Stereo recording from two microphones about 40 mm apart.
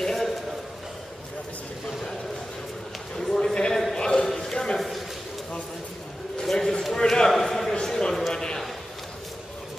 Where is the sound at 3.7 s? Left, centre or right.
Centre.